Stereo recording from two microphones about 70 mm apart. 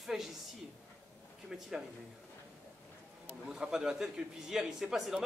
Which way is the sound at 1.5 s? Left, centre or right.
Centre.